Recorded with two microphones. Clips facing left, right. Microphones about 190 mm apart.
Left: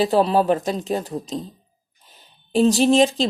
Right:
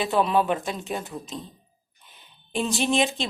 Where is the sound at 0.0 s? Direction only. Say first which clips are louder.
Left 5 dB; 35° left (ahead or behind).